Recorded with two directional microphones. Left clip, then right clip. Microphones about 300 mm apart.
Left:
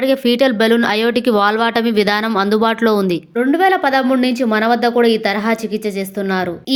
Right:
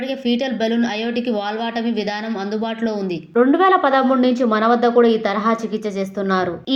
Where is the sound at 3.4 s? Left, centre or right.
Left.